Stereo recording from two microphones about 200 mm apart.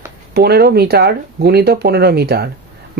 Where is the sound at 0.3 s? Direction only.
50° right (ahead or behind).